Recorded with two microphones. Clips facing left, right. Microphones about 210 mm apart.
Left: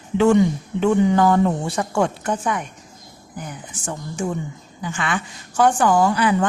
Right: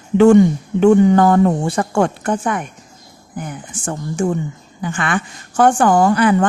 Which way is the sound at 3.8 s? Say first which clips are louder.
Right 6 dB; 50° right (ahead or behind).